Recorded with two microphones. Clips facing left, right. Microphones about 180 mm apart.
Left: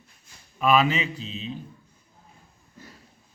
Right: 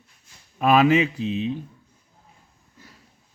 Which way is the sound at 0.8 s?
55° right (ahead or behind).